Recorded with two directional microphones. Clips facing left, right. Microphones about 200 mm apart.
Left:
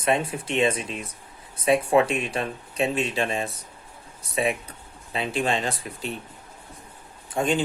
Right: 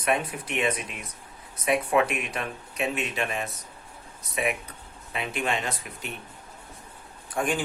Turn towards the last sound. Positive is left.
turn(degrees=25)  # may be behind; listen again after turning